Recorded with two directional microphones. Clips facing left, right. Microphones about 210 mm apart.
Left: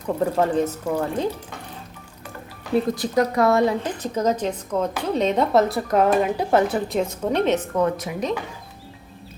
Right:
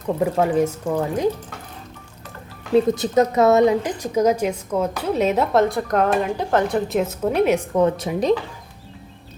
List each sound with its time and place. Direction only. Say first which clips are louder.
0.2 s speech: right 2 dB; 10° right (ahead or behind)
2.7 s a woman's voice: right 4 dB; 25° right (ahead or behind)
7.9 s speech: right 4 dB; 30° right (ahead or behind)